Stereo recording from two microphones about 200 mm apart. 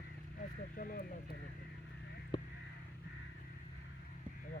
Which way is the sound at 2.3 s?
20° left (ahead or behind).